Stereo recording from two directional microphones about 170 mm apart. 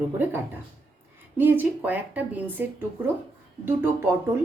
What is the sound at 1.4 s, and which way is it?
A woman's voice, 10° right (ahead or behind).